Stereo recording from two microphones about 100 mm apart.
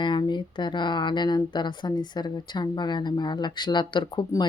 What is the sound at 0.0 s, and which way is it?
A woman's voice, 50° left (ahead or behind).